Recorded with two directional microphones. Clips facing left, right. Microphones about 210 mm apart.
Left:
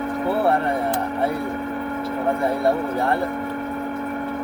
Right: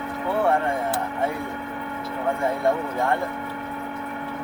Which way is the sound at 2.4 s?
35° left (ahead or behind).